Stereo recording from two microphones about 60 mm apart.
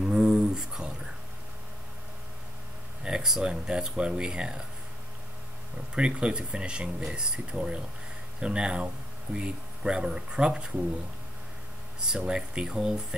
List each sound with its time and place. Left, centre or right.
0.0 s a sound: centre
3.0 s speech: centre
5.9 s speech: centre
12.3 s speech: centre